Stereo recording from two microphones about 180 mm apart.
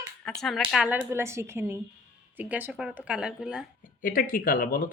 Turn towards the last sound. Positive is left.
turn(degrees=50)  # may be behind; listen again after turning